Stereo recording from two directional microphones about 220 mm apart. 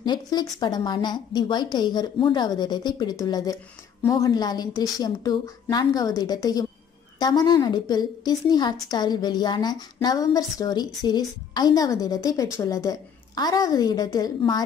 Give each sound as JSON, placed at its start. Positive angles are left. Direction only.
{"t": 0.0, "sound": "a woman's voice", "side_deg": 20}